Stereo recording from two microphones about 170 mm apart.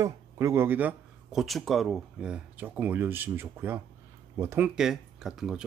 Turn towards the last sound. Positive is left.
turn(degrees=0)  # may be behind; listen again after turning